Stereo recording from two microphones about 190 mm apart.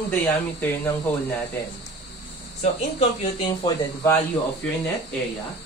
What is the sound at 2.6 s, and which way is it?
Speech, 30° left (ahead or behind).